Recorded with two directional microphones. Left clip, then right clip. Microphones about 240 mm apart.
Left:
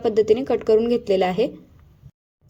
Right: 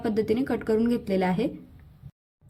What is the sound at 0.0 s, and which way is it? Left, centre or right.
A woman's voice, centre.